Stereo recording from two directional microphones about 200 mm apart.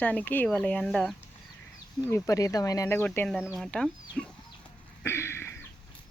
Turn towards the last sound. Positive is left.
turn(degrees=10)  # may be behind; listen again after turning